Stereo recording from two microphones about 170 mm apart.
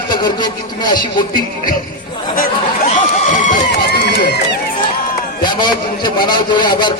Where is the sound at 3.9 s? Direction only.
80° left.